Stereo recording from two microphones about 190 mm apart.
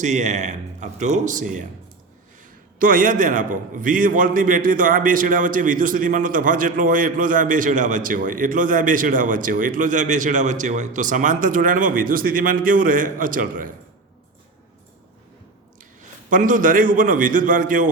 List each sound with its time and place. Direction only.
0.0 s speech: 40° right (ahead or behind)
2.7 s a man's voice: 45° right (ahead or behind)
15.8 s a man's voice: 40° right (ahead or behind)